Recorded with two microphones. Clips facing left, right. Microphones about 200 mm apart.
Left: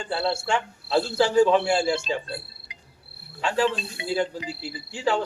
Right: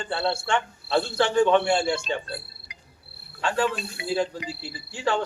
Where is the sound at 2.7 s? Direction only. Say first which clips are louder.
Left 1 dB; 25° left (ahead or behind).